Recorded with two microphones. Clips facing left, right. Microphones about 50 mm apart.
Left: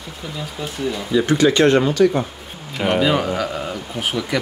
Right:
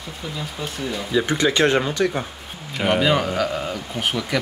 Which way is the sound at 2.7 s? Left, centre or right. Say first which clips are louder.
Left 1 dB; centre.